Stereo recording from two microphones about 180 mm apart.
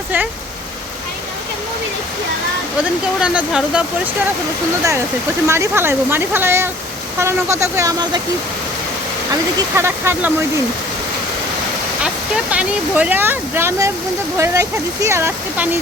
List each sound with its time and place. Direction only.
3.2 s speech: 5° right (ahead or behind)
5.5 s speech: 15° right (ahead or behind)
9.3 s speech: 15° right (ahead or behind)
12.0 s speech: 5° right (ahead or behind)